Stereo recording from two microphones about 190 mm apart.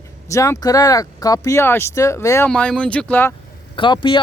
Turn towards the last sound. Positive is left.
turn(degrees=25)  # may be behind; listen again after turning